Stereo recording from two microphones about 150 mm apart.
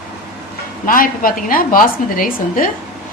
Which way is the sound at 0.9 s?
70° left (ahead or behind).